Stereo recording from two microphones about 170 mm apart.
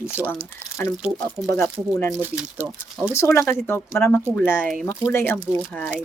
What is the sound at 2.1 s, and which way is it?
Speech, 10° right (ahead or behind).